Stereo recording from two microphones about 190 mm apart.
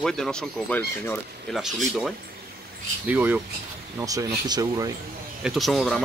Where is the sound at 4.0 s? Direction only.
20° right (ahead or behind).